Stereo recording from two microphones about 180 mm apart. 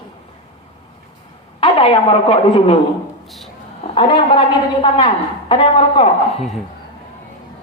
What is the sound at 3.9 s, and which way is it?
A woman's voice, 30° left (ahead or behind).